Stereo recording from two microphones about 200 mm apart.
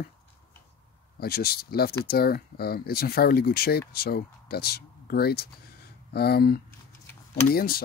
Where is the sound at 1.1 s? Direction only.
50° left (ahead or behind).